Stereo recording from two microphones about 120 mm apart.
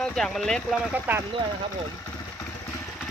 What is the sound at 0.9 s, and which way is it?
Speech, 15° right (ahead or behind).